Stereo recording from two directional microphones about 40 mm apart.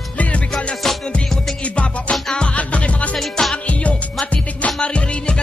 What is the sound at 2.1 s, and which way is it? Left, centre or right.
Music, centre.